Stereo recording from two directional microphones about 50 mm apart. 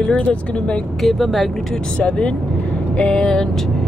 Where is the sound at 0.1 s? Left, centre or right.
Left.